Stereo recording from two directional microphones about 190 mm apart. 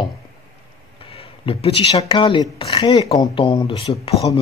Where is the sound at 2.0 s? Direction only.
25° left (ahead or behind).